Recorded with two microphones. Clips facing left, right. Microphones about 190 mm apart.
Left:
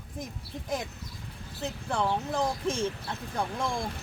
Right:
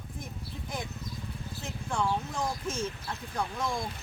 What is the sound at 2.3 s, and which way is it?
Speech, 30° left (ahead or behind).